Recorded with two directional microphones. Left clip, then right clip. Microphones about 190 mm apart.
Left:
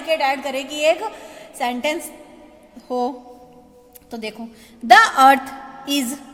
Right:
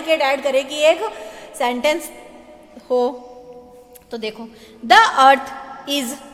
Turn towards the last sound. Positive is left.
turn(degrees=25)  # may be behind; listen again after turning